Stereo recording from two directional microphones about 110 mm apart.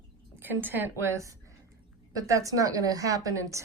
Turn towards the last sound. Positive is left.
turn(degrees=-30)  # may be behind; listen again after turning